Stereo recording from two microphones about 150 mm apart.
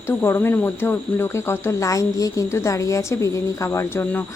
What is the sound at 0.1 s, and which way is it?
Speech, 15° left (ahead or behind).